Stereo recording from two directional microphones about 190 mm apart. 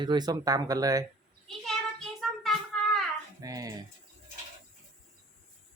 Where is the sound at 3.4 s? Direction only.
20° right (ahead or behind).